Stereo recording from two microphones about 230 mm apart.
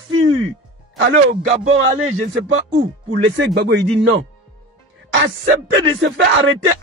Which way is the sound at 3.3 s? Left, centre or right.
Right.